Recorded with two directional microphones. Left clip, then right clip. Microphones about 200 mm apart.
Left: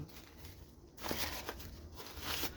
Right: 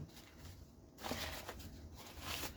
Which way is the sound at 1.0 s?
50° left (ahead or behind).